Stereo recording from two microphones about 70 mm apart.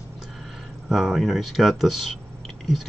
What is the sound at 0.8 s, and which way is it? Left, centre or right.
Speech, centre.